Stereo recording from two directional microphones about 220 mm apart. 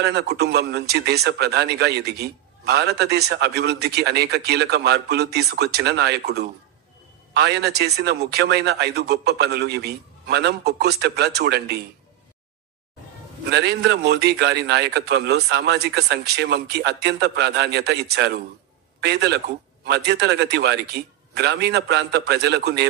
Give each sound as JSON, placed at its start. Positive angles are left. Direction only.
{"t": 0.0, "sound": "speech", "side_deg": -50}
{"t": 13.5, "sound": "a man's voice", "side_deg": -50}